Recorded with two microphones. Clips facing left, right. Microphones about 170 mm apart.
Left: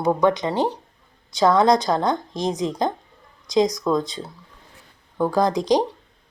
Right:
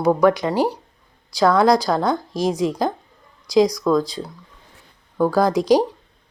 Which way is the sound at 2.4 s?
20° left (ahead or behind).